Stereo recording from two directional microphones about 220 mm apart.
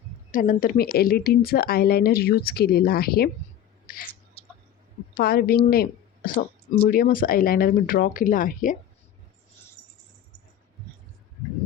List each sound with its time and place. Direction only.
0.3 s speech: 35° left (ahead or behind)
3.8 s a sound: 40° left (ahead or behind)
5.1 s a woman's voice: 45° left (ahead or behind)